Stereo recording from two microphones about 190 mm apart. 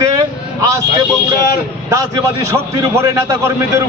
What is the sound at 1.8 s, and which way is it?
A man's voice, 15° right (ahead or behind).